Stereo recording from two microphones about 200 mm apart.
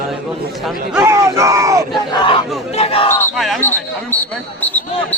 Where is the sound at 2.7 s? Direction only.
30° left (ahead or behind).